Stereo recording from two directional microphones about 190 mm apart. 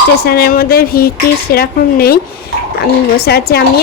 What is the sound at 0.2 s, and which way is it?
A woman's voice, 55° left (ahead or behind).